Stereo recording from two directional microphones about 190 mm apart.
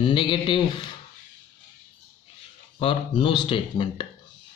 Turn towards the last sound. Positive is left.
turn(degrees=30)  # may be behind; listen again after turning